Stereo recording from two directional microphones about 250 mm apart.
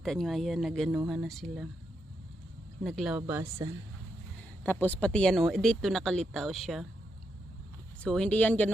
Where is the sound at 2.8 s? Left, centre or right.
Centre.